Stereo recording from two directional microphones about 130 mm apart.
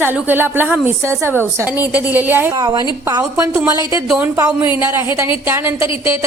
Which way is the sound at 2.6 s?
35° right (ahead or behind).